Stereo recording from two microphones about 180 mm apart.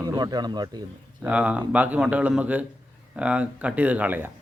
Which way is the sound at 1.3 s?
5° right (ahead or behind).